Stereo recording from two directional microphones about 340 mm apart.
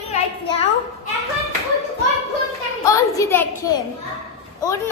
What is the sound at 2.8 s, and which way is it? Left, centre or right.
A child's voice, centre.